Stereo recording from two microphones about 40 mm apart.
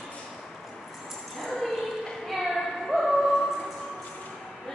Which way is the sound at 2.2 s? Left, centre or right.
Centre.